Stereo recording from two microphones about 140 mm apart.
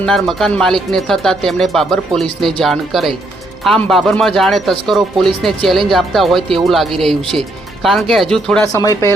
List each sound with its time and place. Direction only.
0.0 s speech: 5° left (ahead or behind)
8.7 s speech: 25° left (ahead or behind)